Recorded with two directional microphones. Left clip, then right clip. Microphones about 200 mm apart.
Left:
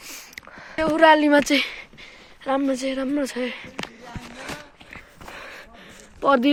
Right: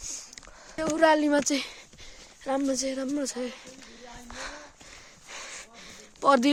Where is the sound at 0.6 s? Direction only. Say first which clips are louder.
Left 8 dB; 10° right (ahead or behind).